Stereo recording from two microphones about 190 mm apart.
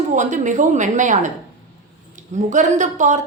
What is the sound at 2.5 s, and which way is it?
Speech, 40° right (ahead or behind).